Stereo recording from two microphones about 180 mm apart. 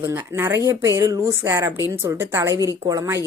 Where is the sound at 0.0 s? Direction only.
10° right (ahead or behind).